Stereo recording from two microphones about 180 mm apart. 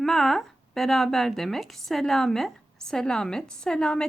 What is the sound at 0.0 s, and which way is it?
Speech, centre (ahead or behind).